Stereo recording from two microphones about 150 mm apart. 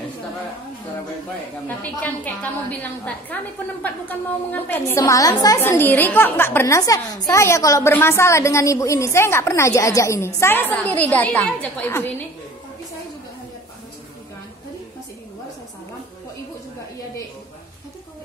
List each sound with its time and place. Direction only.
1.8 s a woman's voice: 10° left (ahead or behind)